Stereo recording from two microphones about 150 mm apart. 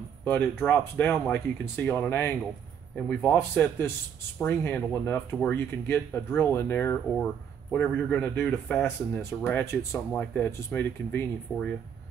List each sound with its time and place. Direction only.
0.2 s speech: 15° left (ahead or behind)
3.0 s speech: 5° left (ahead or behind)